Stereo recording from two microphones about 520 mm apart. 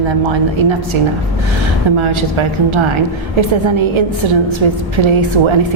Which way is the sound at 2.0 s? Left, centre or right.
Right.